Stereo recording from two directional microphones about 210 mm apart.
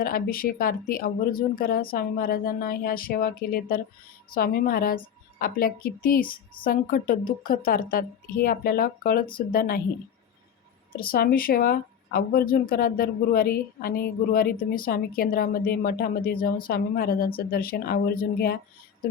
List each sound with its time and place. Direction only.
0.0 s speech: 45° left (ahead or behind)
10.9 s speech: 45° left (ahead or behind)